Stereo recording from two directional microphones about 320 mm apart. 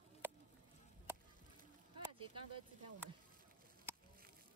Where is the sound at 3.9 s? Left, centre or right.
Centre.